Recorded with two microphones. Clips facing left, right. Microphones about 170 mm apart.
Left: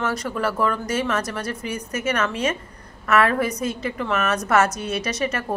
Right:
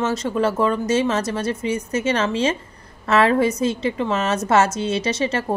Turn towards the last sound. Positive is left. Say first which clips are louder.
# right 3 dB
turn(degrees=-25)  # may be behind; listen again after turning